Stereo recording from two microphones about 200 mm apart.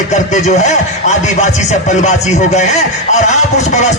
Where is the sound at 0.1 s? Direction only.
35° left (ahead or behind).